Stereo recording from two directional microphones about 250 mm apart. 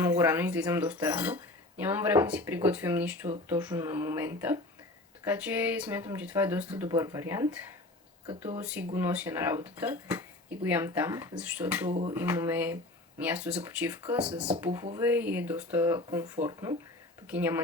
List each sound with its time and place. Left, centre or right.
0.0 s speech: centre
11.9 s speech: right
12.1 s speech: centre